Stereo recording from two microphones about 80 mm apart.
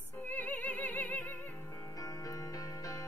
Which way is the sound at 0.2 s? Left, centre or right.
Left.